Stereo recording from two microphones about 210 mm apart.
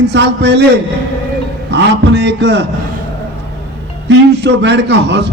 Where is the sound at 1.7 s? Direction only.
55° right (ahead or behind).